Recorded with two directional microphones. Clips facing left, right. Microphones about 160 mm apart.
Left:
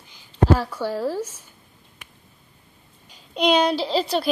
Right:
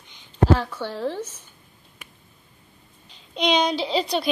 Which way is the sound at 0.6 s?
10° left (ahead or behind).